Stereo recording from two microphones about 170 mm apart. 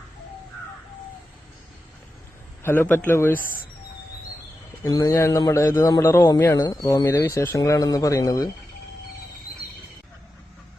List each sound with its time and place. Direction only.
2.6 s a man's voice: 10° left (ahead or behind)
4.8 s a man's voice: 20° left (ahead or behind)